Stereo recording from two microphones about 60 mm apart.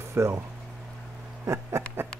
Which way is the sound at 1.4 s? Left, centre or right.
Right.